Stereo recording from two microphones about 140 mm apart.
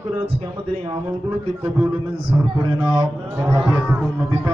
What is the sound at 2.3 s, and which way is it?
A man's voice, 30° right (ahead or behind).